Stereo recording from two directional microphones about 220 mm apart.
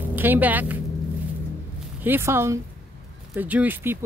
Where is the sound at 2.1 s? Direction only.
10° right (ahead or behind).